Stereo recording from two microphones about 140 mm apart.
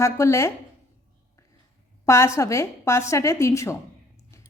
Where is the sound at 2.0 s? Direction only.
20° left (ahead or behind).